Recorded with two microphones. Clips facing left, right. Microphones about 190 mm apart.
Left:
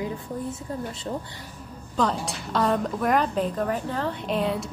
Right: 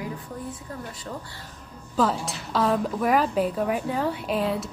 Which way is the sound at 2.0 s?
5° right (ahead or behind).